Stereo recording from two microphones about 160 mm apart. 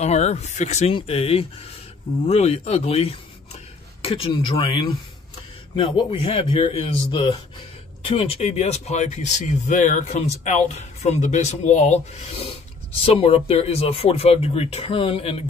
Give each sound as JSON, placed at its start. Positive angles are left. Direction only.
{"t": 0.0, "sound": "speech", "side_deg": 45}